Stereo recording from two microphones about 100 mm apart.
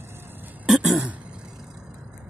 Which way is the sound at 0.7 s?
5° right (ahead or behind).